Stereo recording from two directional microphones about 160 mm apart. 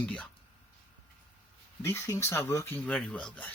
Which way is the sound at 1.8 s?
15° left (ahead or behind).